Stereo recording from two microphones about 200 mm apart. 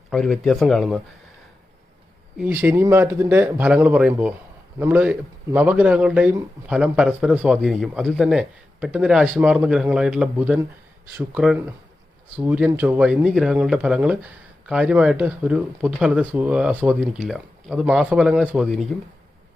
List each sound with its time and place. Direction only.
0.1 s speech: centre (ahead or behind)
2.4 s speech: 10° right (ahead or behind)